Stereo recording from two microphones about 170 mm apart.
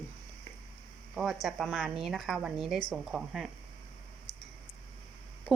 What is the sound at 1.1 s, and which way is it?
A woman's voice, centre (ahead or behind).